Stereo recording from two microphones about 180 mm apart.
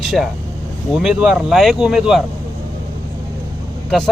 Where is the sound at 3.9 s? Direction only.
Centre (ahead or behind).